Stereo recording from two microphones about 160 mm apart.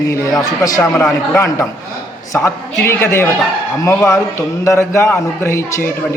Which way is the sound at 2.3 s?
15° left (ahead or behind).